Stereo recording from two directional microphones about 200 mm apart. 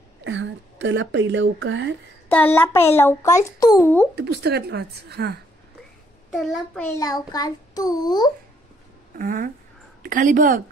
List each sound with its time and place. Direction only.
0.2 s speech: 65° right (ahead or behind)
2.2 s a child's voice: 10° left (ahead or behind)
4.1 s a woman's voice: 55° right (ahead or behind)
6.3 s a child's voice: centre (ahead or behind)
6.8 s a child's voice: 15° left (ahead or behind)
9.2 s a woman's voice: 45° right (ahead or behind)